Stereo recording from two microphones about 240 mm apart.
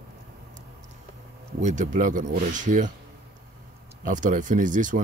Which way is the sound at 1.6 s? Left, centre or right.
Right.